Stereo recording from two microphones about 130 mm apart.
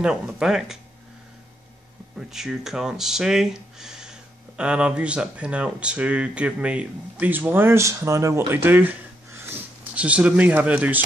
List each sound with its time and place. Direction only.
0.0 s speech: 5° right (ahead or behind)
2.1 s speech: 5° right (ahead or behind)